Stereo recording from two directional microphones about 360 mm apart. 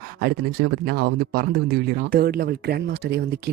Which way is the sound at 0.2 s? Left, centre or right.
Right.